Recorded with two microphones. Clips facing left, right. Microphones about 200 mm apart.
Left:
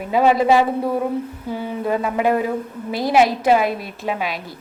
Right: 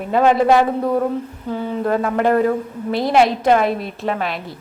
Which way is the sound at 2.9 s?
5° left (ahead or behind).